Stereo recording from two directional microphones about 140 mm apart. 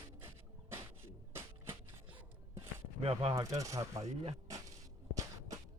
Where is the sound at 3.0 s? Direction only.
45° right (ahead or behind).